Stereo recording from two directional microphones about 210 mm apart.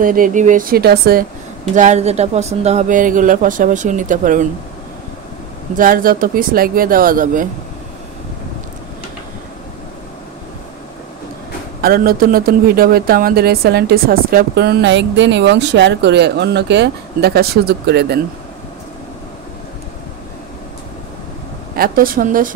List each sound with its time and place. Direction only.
0.0 s speech: 40° right (ahead or behind)
1.8 s speech: 35° right (ahead or behind)
5.8 s speech: 40° right (ahead or behind)
11.8 s speech: 45° right (ahead or behind)
21.7 s speech: 45° right (ahead or behind)